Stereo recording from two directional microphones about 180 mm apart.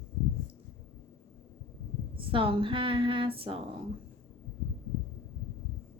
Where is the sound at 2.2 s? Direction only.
30° right (ahead or behind).